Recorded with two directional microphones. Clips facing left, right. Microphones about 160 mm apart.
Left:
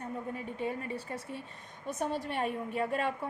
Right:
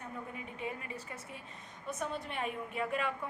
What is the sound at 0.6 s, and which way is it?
A woman's voice, 35° left (ahead or behind).